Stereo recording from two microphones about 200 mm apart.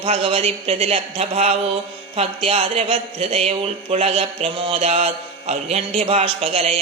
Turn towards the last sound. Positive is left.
turn(degrees=-30)  # may be behind; listen again after turning